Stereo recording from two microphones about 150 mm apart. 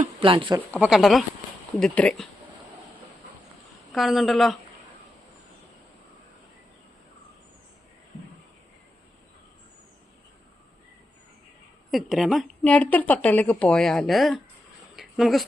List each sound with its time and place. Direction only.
0.2 s speech: 35° right (ahead or behind)
0.8 s a woman's voice: centre (ahead or behind)
3.9 s a woman's voice: centre (ahead or behind)
11.9 s a woman's voice: centre (ahead or behind)
14.9 s a sound: centre (ahead or behind)